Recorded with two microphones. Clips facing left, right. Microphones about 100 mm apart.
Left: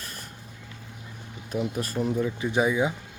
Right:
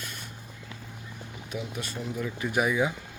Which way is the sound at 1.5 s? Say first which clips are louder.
Left 7 dB; 40° left (ahead or behind).